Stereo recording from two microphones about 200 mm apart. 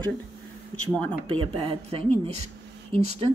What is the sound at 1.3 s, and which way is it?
Speech, 25° right (ahead or behind).